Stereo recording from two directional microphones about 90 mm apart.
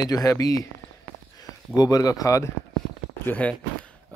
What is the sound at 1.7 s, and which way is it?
Speech, 45° left (ahead or behind).